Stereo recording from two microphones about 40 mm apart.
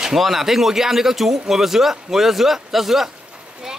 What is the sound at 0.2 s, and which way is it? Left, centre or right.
Speech, centre.